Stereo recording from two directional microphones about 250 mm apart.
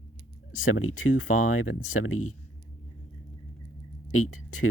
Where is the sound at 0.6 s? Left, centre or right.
Left.